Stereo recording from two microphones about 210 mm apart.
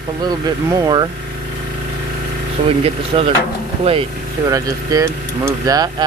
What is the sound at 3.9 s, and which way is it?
Speech, 25° right (ahead or behind).